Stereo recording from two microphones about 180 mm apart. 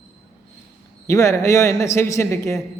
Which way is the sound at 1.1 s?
15° left (ahead or behind).